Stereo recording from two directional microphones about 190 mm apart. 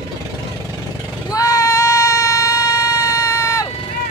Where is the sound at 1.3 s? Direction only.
15° left (ahead or behind).